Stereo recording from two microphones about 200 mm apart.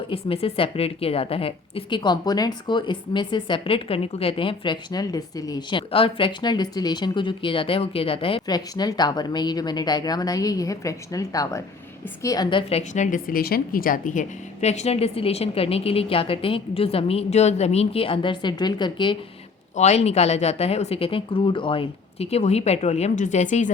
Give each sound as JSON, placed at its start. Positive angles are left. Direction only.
{"t": 0.1, "sound": "a woman's voice", "side_deg": 30}
{"t": 12.9, "sound": "a woman's voice", "side_deg": 40}
{"t": 19.7, "sound": "speech", "side_deg": 35}